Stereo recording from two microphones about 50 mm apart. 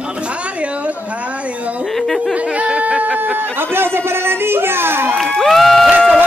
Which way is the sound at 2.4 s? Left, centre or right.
Right.